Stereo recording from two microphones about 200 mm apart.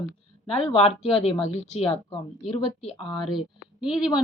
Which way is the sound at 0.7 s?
25° left (ahead or behind).